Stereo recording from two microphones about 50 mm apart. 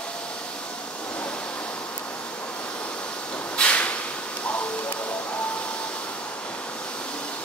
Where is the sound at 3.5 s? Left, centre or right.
Left.